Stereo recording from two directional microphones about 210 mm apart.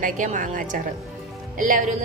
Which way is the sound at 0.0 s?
40° right (ahead or behind).